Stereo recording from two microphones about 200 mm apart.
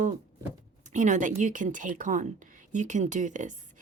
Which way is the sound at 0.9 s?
40° right (ahead or behind).